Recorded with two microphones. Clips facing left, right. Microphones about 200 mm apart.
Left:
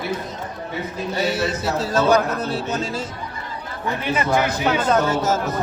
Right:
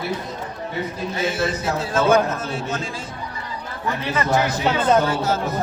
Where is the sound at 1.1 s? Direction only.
40° left (ahead or behind).